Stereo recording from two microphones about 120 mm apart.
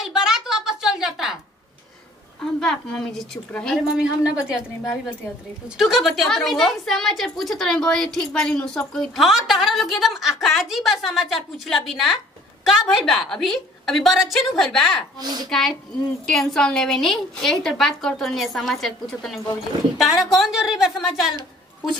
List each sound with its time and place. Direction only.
0.0 s a sound: 5° right (ahead or behind)
2.4 s a woman's voice: 5° left (ahead or behind)
3.8 s a woman's voice: 5° right (ahead or behind)
15.1 s a child's voice: 35° right (ahead or behind)
16.3 s a woman's voice: 5° left (ahead or behind)